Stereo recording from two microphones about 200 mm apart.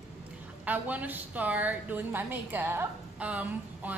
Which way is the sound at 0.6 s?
10° right (ahead or behind).